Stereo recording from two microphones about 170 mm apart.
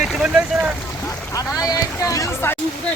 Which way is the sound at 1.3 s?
20° left (ahead or behind).